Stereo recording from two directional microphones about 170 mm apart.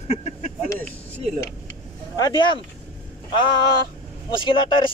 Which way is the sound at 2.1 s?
25° left (ahead or behind).